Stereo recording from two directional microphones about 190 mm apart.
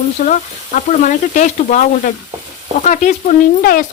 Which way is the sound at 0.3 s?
40° left (ahead or behind).